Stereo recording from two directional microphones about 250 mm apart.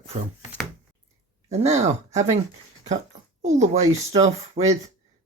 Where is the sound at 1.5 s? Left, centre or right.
Right.